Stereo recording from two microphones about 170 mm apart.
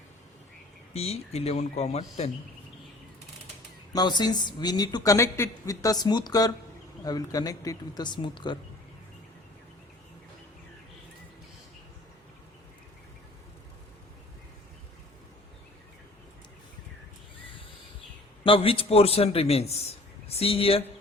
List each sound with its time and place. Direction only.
0.9 s a man's voice: 35° left (ahead or behind)
3.9 s a woman's voice: 25° left (ahead or behind)
18.4 s a man's voice: 35° left (ahead or behind)